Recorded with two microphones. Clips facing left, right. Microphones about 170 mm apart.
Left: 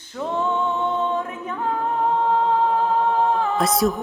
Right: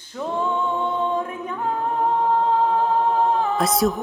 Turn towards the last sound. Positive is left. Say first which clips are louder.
# even
turn(degrees=0)  # may be behind; listen again after turning